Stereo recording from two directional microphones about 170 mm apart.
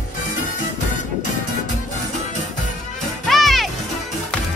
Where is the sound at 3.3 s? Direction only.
Centre (ahead or behind).